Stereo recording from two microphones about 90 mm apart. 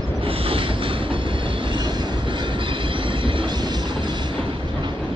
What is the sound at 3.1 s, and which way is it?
Train, 70° right (ahead or behind).